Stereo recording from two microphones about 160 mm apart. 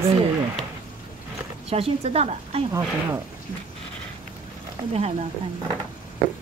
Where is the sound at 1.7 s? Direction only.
40° right (ahead or behind).